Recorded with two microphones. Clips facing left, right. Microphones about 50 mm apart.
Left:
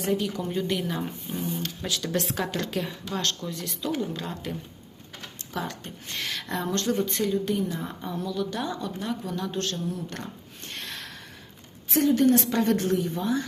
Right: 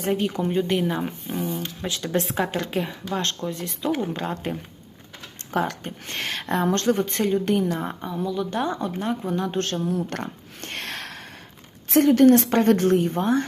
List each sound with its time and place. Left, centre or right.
0.0 s speech: right
5.5 s speech: right
8.0 s speech: centre
8.4 s speech: right
9.7 s a sound: right
11.9 s a woman's voice: right